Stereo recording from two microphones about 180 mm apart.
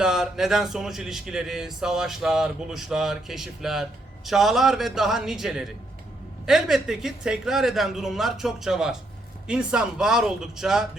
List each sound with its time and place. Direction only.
0.0 s a man's voice: 5° right (ahead or behind)